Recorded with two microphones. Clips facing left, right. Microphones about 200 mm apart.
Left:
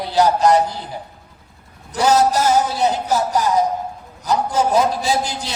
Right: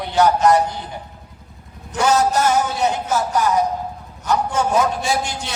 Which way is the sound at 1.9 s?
35° left (ahead or behind).